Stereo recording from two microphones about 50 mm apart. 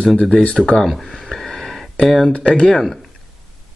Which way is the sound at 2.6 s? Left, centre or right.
Centre.